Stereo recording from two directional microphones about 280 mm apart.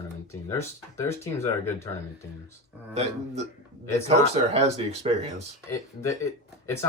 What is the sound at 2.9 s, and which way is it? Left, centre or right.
Speech, right.